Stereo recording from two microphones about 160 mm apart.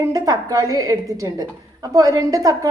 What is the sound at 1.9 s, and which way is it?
Speech, 20° right (ahead or behind).